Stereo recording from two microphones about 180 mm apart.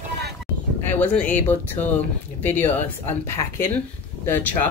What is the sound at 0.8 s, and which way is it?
Speech, 10° left (ahead or behind).